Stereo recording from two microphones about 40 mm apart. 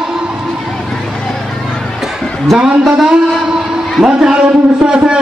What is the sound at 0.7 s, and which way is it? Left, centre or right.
Vehicle, centre.